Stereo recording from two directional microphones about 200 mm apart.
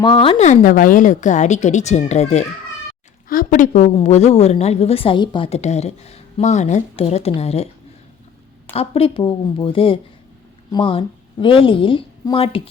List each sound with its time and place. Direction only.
0.0 s a woman's voice: 25° left (ahead or behind)
3.2 s a woman's voice: 45° left (ahead or behind)
8.7 s a woman's voice: 30° left (ahead or behind)